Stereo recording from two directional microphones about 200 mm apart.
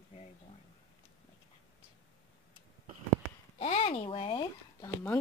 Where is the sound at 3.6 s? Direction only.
30° left (ahead or behind).